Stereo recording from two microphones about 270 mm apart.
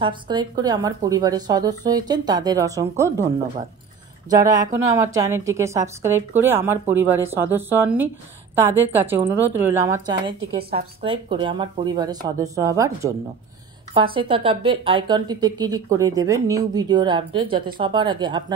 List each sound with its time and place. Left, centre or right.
0.0 s speech: centre
4.9 s speech: centre
10.4 s a woman's voice: right
11.0 s speech: centre